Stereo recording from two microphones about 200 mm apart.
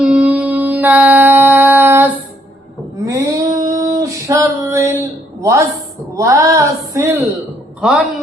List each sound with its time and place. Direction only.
0.0 s a sound: 5° right (ahead or behind)
3.1 s female singing: 15° right (ahead or behind)
5.4 s a woman's voice: 15° right (ahead or behind)